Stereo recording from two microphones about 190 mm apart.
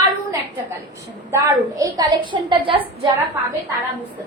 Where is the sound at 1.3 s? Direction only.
15° right (ahead or behind).